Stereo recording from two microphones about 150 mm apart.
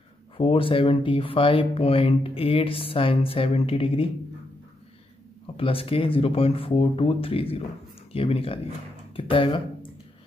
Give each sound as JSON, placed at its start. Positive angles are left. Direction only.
{"t": 0.4, "sound": "speech", "side_deg": 35}
{"t": 5.6, "sound": "speech", "side_deg": 40}